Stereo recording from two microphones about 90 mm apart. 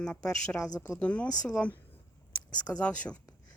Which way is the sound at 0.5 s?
40° left (ahead or behind).